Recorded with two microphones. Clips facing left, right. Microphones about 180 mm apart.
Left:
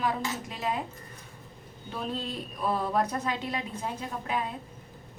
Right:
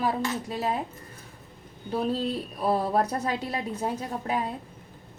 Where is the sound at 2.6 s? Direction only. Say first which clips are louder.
Right 3 dB; 35° right (ahead or behind).